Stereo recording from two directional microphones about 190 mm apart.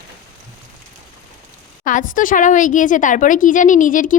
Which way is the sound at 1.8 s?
45° left (ahead or behind).